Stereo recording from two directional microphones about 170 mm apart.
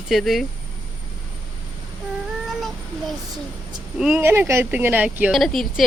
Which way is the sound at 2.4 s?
Centre (ahead or behind).